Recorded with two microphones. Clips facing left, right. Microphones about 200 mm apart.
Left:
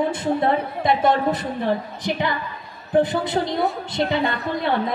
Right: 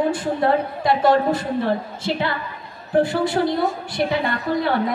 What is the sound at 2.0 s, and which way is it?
Music, 15° left (ahead or behind).